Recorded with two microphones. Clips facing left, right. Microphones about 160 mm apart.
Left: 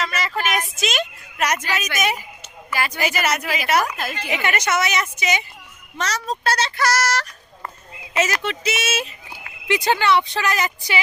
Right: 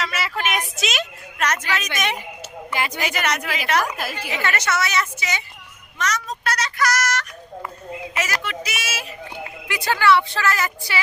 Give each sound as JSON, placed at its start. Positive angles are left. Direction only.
{"t": 0.0, "sound": "vehicle", "side_deg": -5}
{"t": 0.3, "sound": "a woman's voice", "side_deg": 0}
{"t": 1.4, "sound": "a woman's voice", "side_deg": 10}
{"t": 2.7, "sound": "speech", "side_deg": -20}
{"t": 3.0, "sound": "a woman's voice", "side_deg": 5}
{"t": 3.9, "sound": "a woman's voice", "side_deg": -10}
{"t": 4.3, "sound": "a woman's voice", "side_deg": 15}
{"t": 6.0, "sound": "speech", "side_deg": 30}
{"t": 8.4, "sound": "a woman's voice", "side_deg": 25}